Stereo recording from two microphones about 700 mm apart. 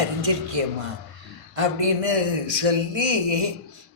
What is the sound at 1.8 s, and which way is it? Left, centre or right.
A man's voice, right.